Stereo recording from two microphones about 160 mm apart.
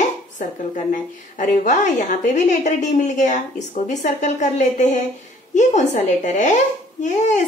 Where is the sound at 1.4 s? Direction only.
55° left (ahead or behind).